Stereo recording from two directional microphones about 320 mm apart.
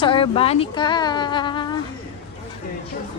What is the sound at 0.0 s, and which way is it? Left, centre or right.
Speech, centre.